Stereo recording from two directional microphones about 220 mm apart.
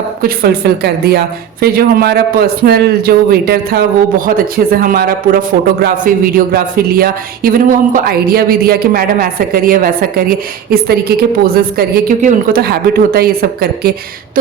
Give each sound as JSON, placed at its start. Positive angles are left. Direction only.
{"t": 0.2, "sound": "speech", "side_deg": -45}